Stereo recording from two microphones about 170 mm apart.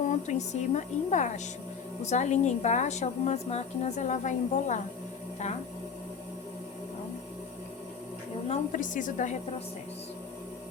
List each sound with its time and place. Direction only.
0.3 s a woman's voice: 45° left (ahead or behind)
8.4 s a woman's voice: 50° left (ahead or behind)